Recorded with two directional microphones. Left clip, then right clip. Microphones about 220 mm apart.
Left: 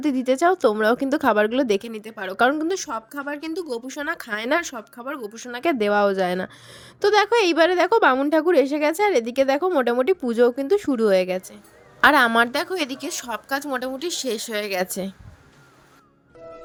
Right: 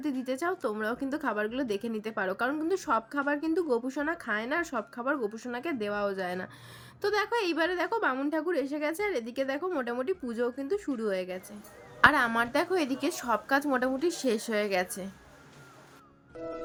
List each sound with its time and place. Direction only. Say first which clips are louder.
0.0 s a woman's voice: left 12 dB; 35° left (ahead or behind)
2.9 s a woman's voice: right 1 dB; centre (ahead or behind)
3.3 s a woman's voice: even; 35° left (ahead or behind)
4.7 s a woman's voice: right 1 dB; centre (ahead or behind)
5.3 s a woman's voice: left 11 dB; 35° left (ahead or behind)
16.4 s music: right 2 dB; centre (ahead or behind)